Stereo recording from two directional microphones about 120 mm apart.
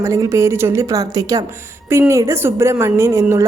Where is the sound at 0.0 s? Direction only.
25° right (ahead or behind).